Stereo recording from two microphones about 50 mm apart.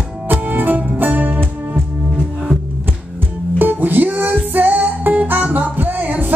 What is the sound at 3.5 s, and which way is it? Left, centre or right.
Music, right.